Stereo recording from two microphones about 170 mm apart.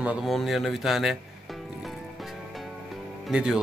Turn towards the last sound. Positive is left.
turn(degrees=-5)  # may be behind; listen again after turning